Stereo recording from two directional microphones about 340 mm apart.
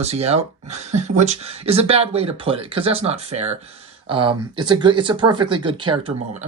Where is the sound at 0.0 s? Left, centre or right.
Centre.